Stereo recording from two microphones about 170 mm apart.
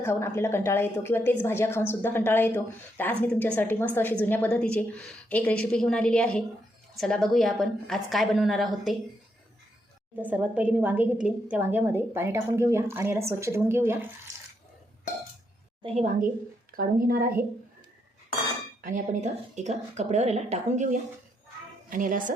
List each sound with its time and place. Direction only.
0.0 s a woman's voice: 15° left (ahead or behind); by 9.0 s centre (ahead or behind)
10.2 s a woman's voice: 10° right (ahead or behind)
15.8 s a woman's voice: 40° right (ahead or behind)
16.7 s speech: 60° right (ahead or behind)
18.8 s a woman's voice: 50° right (ahead or behind)